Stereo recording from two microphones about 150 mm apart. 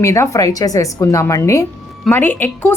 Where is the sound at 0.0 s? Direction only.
20° left (ahead or behind).